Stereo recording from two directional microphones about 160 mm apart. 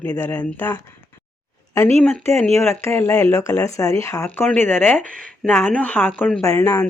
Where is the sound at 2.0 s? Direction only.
10° left (ahead or behind).